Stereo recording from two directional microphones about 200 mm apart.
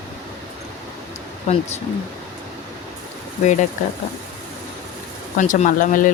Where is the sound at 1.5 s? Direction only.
35° left (ahead or behind).